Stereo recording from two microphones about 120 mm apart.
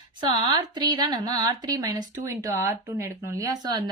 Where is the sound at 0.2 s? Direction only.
35° right (ahead or behind).